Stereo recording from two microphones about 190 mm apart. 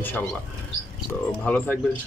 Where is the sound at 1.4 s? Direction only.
5° left (ahead or behind).